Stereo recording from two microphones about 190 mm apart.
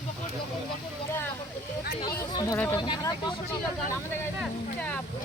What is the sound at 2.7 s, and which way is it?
Speech, 25° left (ahead or behind).